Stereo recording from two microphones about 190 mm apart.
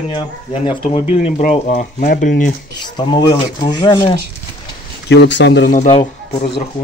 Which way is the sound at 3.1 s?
20° left (ahead or behind).